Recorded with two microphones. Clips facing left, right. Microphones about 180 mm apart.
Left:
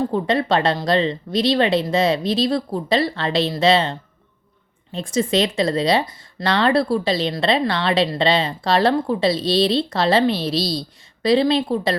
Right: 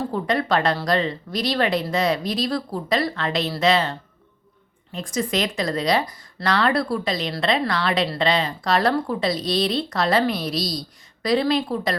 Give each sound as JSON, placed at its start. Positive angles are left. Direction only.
{"t": 0.1, "sound": "a woman's voice", "side_deg": 25}